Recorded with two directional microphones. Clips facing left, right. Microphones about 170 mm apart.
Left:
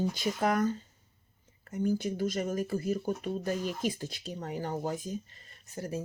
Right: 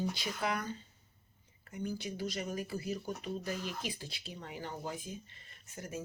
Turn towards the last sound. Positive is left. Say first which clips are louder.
# left 7 dB
turn(degrees=35)  # may be behind; listen again after turning